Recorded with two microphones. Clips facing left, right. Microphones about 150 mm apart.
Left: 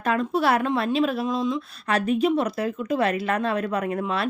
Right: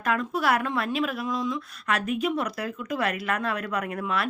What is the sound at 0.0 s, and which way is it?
Speech, 30° left (ahead or behind).